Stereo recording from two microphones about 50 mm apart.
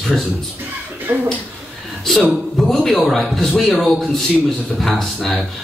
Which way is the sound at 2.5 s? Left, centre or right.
Centre.